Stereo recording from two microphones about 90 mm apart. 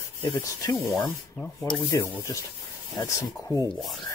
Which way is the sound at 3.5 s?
60° left (ahead or behind).